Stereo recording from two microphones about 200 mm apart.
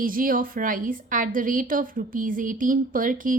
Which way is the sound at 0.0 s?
45° right (ahead or behind).